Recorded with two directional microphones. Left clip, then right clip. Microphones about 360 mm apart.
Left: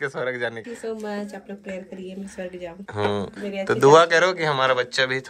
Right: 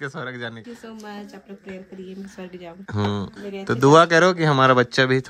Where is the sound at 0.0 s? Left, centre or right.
Centre.